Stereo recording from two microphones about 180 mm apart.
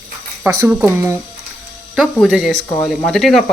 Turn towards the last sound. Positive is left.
turn(degrees=0)  # may be behind; listen again after turning